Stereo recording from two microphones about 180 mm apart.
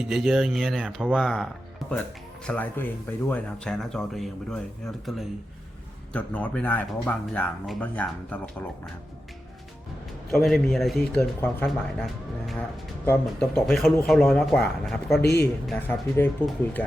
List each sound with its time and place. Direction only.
0.0 s speech: centre (ahead or behind)
10.3 s speech: centre (ahead or behind)
15.2 s speech: 65° left (ahead or behind)
15.6 s speech: centre (ahead or behind)
16.2 s speech: 10° left (ahead or behind)